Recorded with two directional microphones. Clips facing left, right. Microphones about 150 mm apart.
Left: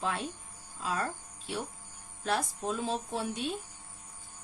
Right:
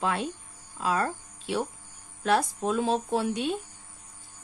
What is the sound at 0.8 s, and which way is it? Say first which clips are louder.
Speech: right 7 dB; 85° right.